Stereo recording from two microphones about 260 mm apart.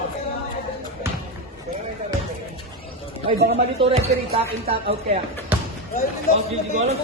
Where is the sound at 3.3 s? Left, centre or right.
Right.